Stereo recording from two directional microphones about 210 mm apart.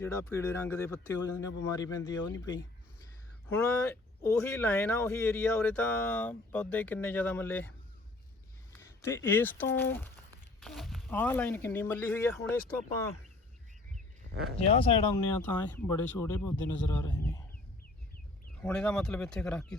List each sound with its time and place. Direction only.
0.0 s speech: 15° left (ahead or behind)
8.8 s speech: 15° left (ahead or behind)
14.7 s speech: 25° left (ahead or behind)
15.4 s speech: 10° left (ahead or behind)
18.6 s speech: 5° left (ahead or behind)